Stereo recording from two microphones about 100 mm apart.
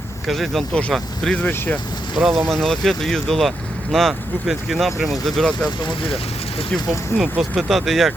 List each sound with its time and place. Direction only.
0.3 s speech: centre (ahead or behind)
1.5 s speech: 20° left (ahead or behind)
2.1 s speech: 5° right (ahead or behind)
7.2 s speech: 5° right (ahead or behind)